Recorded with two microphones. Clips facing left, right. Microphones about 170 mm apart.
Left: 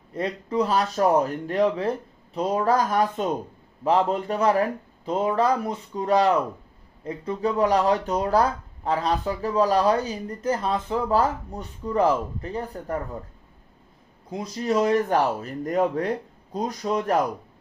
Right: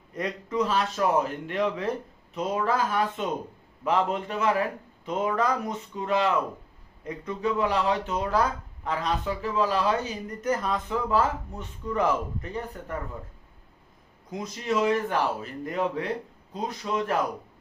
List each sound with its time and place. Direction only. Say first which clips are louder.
0.1 s speech: left 3 dB; 30° left (ahead or behind)
14.3 s speech: left 4 dB; 30° left (ahead or behind)